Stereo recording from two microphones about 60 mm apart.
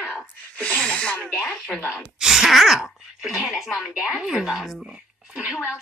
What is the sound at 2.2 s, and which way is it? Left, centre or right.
Sneeze, centre.